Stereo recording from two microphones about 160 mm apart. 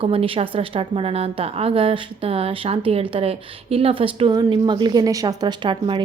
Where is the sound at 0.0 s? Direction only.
35° right (ahead or behind).